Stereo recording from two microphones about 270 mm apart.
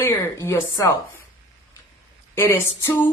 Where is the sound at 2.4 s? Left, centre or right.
Centre.